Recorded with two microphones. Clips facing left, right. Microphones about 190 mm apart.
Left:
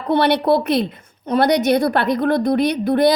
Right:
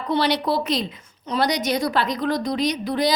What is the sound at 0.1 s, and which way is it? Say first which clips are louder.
A woman's voice: left 6 dB; 60° left (ahead or behind).